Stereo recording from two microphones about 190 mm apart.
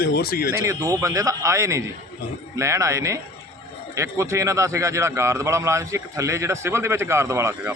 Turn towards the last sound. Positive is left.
turn(degrees=-15)  # may be behind; listen again after turning